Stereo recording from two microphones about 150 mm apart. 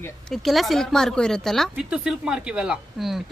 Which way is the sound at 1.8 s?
10° right (ahead or behind).